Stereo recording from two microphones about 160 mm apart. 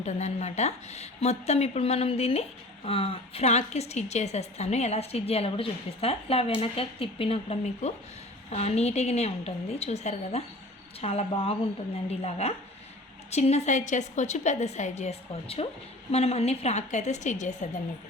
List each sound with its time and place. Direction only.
0.0 s a woman's voice: 45° left (ahead or behind)